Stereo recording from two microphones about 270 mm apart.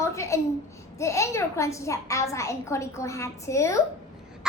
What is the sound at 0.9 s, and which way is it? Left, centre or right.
A child's voice, centre.